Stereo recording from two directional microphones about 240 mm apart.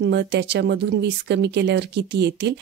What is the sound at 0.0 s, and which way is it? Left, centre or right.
Speech, right.